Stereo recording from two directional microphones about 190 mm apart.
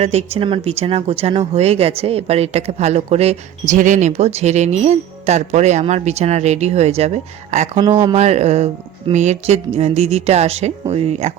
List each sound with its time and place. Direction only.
0.0 s speech: 35° right (ahead or behind)
7.8 s speech: 20° right (ahead or behind)
8.1 s speech: 35° right (ahead or behind)